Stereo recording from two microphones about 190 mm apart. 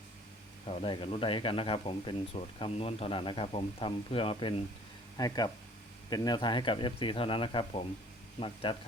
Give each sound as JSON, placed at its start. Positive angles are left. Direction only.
{"t": 0.7, "sound": "speech", "side_deg": 30}